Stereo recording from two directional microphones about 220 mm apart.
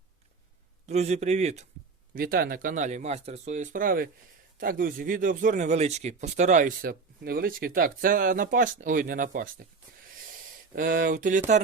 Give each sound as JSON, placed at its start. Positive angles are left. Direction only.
{"t": 0.9, "sound": "speech", "side_deg": -30}
{"t": 2.1, "sound": "speech", "side_deg": -40}
{"t": 10.8, "sound": "speech", "side_deg": -40}